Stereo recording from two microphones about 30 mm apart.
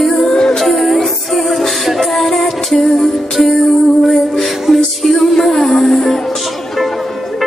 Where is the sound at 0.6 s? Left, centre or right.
Centre.